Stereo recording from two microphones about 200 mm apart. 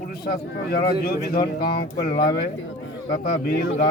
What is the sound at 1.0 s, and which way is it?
Speech, 50° left (ahead or behind).